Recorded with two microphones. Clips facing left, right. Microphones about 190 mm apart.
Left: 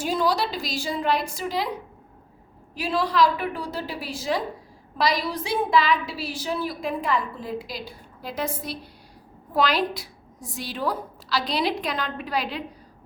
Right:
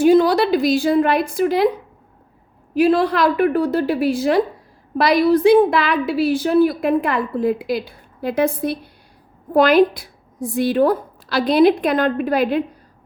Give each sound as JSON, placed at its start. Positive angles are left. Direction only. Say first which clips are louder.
{"t": 0.0, "sound": "a woman's voice", "louder": "right 11 dB", "side_deg": -60}
{"t": 2.7, "sound": "a woman's voice", "louder": "right 8 dB", "side_deg": -55}